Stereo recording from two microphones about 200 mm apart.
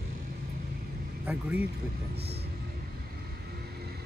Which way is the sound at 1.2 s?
10° right (ahead or behind).